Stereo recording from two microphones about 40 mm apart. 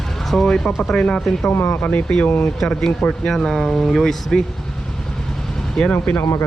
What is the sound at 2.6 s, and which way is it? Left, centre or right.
Speech, centre.